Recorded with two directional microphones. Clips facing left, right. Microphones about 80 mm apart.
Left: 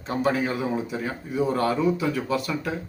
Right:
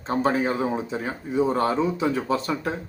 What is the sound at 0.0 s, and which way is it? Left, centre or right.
A man's voice, right.